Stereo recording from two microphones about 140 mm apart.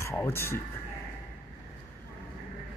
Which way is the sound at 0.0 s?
20° left (ahead or behind).